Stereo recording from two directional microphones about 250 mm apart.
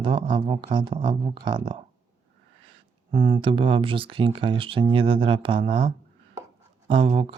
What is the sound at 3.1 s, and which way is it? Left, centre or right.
Speech, right.